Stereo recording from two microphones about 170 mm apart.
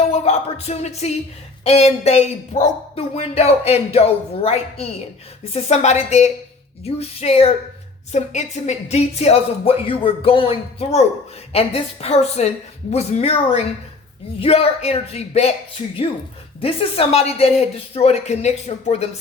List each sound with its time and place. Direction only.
0.0 s speech: 40° left (ahead or behind)
16.6 s speech: 35° left (ahead or behind)